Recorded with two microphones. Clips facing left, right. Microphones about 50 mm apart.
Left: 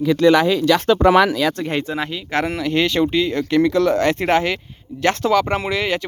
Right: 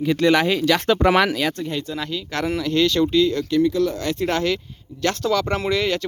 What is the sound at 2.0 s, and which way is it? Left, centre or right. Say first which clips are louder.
Speech: left 4 dB; centre.